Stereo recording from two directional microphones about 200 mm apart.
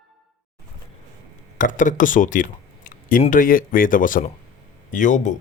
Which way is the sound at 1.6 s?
40° left (ahead or behind).